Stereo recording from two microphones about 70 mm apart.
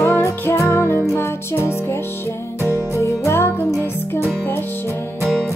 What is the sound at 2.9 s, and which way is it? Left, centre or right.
Music, left.